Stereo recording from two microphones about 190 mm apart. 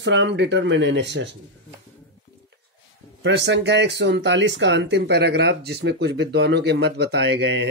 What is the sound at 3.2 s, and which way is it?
Speech, 70° right (ahead or behind).